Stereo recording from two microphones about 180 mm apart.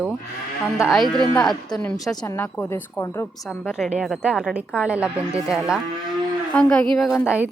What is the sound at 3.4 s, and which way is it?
A woman's voice, 5° left (ahead or behind).